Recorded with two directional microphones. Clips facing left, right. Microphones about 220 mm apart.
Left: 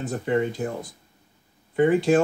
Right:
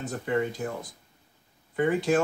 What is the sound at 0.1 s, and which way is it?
Speech, 30° left (ahead or behind).